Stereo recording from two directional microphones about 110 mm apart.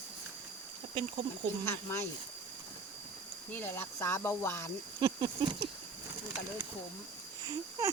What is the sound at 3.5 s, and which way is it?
Speech, 20° left (ahead or behind).